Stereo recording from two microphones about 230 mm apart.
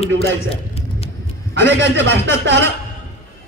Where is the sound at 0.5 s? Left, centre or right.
Left.